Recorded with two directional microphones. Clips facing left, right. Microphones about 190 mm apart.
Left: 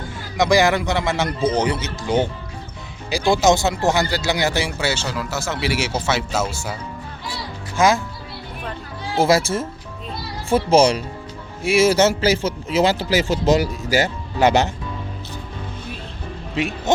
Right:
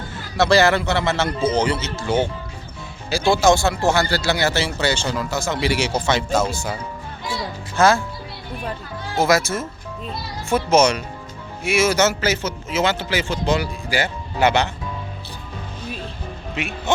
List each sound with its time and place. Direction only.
0.3 s speech: 15° left (ahead or behind)
7.8 s speech: 15° left (ahead or behind)
9.1 s a man's voice: 30° left (ahead or behind)
16.6 s a man's voice: 35° left (ahead or behind)